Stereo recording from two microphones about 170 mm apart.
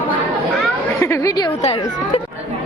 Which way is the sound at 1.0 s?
20° left (ahead or behind).